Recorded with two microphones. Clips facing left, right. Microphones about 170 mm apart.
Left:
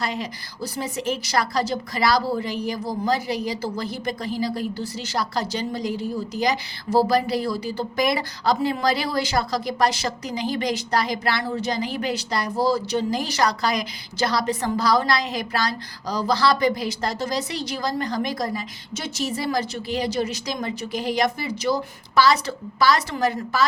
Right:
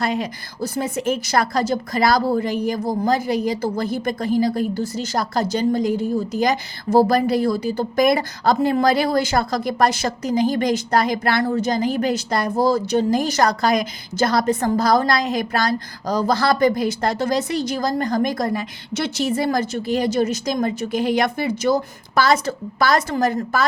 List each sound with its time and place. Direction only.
0.0 s a woman's voice: 50° right (ahead or behind)